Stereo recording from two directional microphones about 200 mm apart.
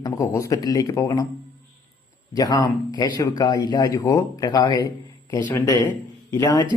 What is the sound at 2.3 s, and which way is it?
A man's voice, 20° left (ahead or behind).